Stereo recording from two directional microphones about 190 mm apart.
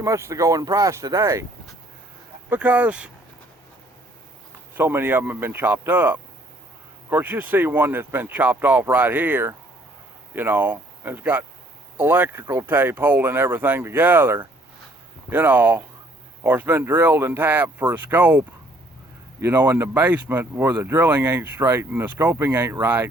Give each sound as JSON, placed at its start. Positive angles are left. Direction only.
{"t": 0.0, "sound": "speech", "side_deg": -15}
{"t": 2.5, "sound": "speech", "side_deg": -5}
{"t": 4.7, "sound": "speech", "side_deg": -10}